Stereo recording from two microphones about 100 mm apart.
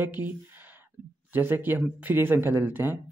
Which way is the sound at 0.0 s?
20° right (ahead or behind).